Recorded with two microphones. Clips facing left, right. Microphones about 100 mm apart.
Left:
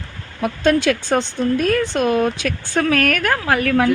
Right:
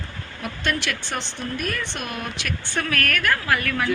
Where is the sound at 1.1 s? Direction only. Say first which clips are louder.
Left 12 dB; 90° left.